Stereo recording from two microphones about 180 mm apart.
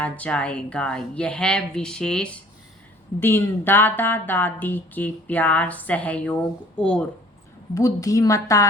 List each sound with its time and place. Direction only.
0.0 s a woman's voice: 5° left (ahead or behind)
7.7 s a woman's voice: 20° left (ahead or behind)